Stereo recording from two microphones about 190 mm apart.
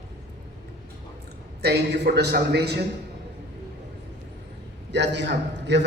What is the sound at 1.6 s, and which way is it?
A man's voice, 60° right (ahead or behind).